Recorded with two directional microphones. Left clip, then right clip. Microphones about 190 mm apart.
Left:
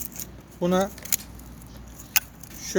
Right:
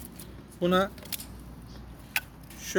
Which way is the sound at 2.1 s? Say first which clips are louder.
Left 5 dB; 35° left (ahead or behind).